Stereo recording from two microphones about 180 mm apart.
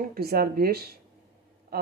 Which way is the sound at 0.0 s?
55° right (ahead or behind).